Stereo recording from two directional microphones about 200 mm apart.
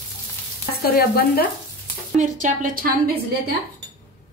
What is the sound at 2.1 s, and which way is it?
A woman's voice, 35° right (ahead or behind).